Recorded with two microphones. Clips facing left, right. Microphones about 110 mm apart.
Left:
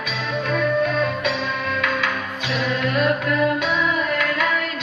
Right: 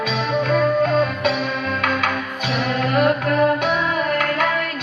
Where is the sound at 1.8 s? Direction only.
55° right (ahead or behind).